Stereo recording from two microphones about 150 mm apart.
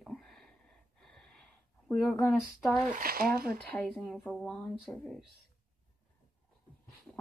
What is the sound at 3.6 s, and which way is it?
Speech, 10° left (ahead or behind).